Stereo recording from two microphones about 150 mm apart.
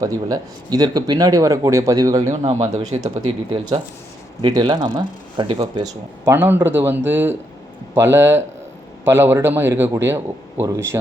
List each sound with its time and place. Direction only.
0.0 s speech: 25° right (ahead or behind)
3.2 s speech: 35° right (ahead or behind)
6.2 s a man's voice: 15° right (ahead or behind)